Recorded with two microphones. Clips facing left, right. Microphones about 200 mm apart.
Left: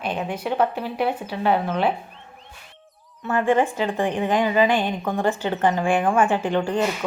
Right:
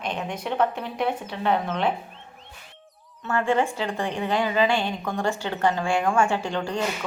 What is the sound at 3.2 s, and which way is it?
A woman's voice, 15° left (ahead or behind).